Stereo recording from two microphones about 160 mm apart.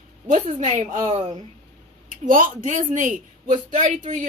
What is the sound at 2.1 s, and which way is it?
A woman's voice, 55° right (ahead or behind).